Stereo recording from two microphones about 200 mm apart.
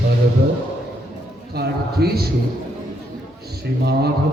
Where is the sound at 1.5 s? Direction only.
50° right (ahead or behind).